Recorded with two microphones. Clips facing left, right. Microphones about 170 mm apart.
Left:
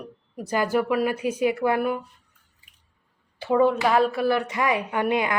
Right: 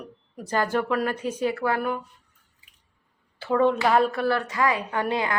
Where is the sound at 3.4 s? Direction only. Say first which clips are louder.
Left 2 dB; 20° left (ahead or behind).